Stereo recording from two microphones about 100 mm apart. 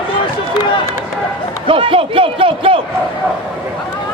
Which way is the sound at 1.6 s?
60° right (ahead or behind).